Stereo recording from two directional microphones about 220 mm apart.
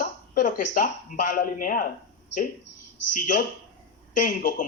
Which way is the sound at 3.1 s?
35° left (ahead or behind).